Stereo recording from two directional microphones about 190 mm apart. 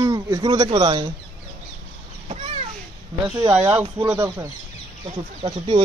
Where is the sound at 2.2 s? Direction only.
35° right (ahead or behind).